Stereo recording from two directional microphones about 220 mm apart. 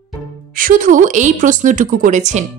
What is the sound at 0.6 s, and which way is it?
A woman's voice, 40° right (ahead or behind).